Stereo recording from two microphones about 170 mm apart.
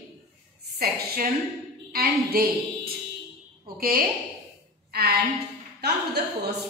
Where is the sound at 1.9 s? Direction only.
60° right (ahead or behind).